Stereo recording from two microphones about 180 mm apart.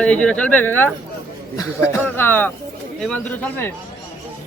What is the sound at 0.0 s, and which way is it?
Speech, 5° left (ahead or behind).